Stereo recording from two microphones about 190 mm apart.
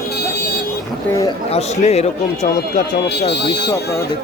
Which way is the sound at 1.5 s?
35° left (ahead or behind).